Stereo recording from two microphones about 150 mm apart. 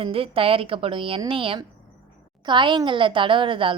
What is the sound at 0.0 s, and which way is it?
A woman's voice, 40° right (ahead or behind).